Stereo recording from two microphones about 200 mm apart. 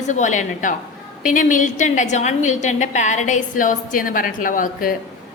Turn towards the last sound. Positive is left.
turn(degrees=45)  # may be behind; listen again after turning